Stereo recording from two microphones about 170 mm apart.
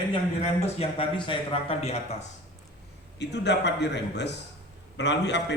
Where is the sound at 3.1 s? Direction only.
90° left.